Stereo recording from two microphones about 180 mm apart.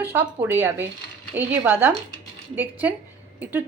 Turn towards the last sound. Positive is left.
turn(degrees=-10)  # may be behind; listen again after turning